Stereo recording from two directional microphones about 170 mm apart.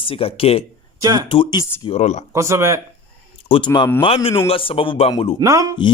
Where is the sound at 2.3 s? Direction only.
15° right (ahead or behind).